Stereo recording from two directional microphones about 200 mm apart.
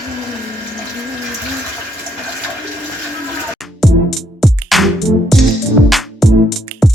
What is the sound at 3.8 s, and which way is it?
Music, centre (ahead or behind).